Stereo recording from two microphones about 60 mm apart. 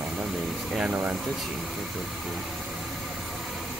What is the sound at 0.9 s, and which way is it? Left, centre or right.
Speech, right.